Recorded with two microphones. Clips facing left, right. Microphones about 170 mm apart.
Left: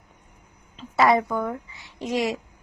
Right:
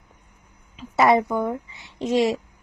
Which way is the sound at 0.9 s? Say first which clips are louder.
Right 2 dB; 20° right (ahead or behind).